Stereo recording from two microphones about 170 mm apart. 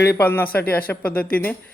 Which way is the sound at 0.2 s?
10° left (ahead or behind).